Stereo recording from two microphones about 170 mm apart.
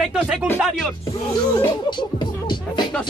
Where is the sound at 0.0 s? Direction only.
Centre (ahead or behind).